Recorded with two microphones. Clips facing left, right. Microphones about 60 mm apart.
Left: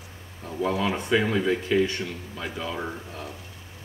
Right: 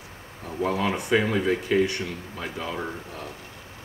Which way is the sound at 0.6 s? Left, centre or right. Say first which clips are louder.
Even; right.